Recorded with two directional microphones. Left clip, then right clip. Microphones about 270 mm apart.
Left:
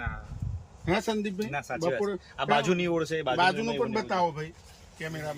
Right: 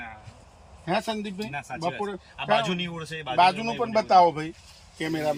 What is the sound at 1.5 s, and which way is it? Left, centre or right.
Speech, centre.